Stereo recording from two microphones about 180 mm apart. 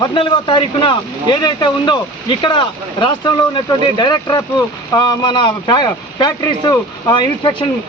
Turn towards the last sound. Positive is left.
turn(degrees=25)  # may be behind; listen again after turning